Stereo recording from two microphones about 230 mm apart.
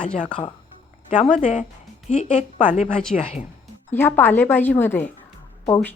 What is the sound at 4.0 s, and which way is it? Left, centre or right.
Speech, centre.